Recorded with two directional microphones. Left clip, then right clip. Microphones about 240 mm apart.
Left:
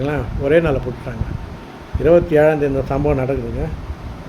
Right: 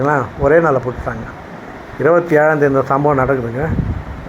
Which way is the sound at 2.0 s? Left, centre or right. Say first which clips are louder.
Right 1 dB; centre.